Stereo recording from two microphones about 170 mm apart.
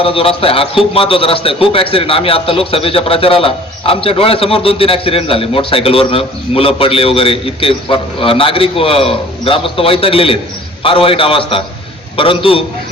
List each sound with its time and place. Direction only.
0.0 s a man's voice: 35° left (ahead or behind)